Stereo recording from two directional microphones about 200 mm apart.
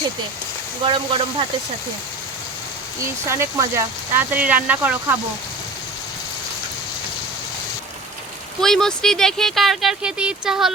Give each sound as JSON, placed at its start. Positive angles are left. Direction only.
{"t": 0.9, "sound": "speech", "side_deg": -25}
{"t": 3.0, "sound": "speech", "side_deg": -15}
{"t": 8.6, "sound": "speech", "side_deg": 0}